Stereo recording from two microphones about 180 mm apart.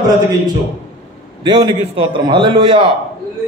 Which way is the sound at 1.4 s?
25° right (ahead or behind).